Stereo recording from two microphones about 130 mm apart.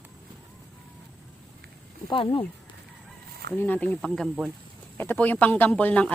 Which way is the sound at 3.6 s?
15° left (ahead or behind).